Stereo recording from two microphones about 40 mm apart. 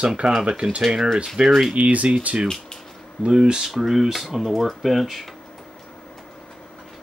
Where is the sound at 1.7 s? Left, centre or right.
Right; by 3.7 s centre.